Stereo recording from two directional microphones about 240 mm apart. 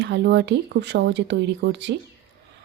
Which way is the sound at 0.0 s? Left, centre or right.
Right.